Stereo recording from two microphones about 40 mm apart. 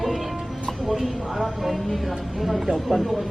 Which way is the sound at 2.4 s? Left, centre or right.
Centre.